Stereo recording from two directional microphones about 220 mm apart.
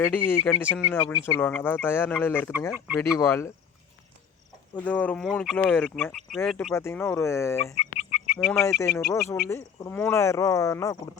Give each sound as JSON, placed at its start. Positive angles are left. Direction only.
{"t": 0.0, "sound": "speech", "side_deg": 10}
{"t": 4.7, "sound": "speech", "side_deg": 5}
{"t": 7.8, "sound": "chicken", "side_deg": 35}
{"t": 8.4, "sound": "speech", "side_deg": 10}